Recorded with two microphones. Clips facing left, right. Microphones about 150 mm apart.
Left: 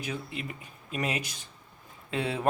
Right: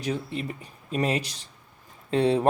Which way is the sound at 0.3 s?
35° right (ahead or behind).